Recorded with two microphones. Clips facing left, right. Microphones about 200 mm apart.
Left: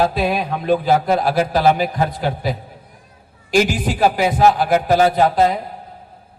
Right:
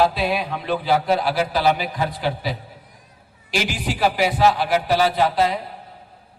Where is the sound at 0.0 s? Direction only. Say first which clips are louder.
Left 2 dB; 45° left (ahead or behind).